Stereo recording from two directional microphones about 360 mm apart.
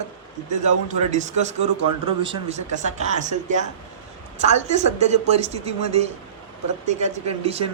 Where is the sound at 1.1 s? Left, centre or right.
Centre.